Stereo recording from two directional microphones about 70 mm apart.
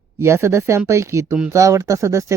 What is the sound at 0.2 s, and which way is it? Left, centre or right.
Speech, right.